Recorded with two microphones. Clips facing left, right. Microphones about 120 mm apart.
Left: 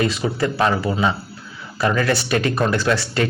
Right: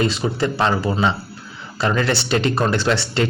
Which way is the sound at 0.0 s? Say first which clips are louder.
Even; 30° right (ahead or behind).